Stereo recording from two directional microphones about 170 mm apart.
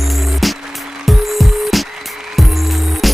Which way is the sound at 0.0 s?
Centre (ahead or behind).